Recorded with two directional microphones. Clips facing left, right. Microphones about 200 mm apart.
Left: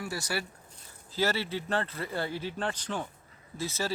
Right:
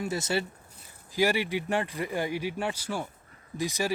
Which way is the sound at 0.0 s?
20° right (ahead or behind).